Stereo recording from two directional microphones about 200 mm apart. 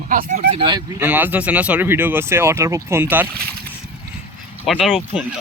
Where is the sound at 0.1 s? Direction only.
40° right (ahead or behind).